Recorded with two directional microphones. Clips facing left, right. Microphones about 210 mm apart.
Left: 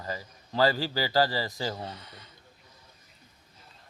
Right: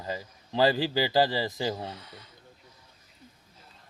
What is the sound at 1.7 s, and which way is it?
Speech, 10° right (ahead or behind).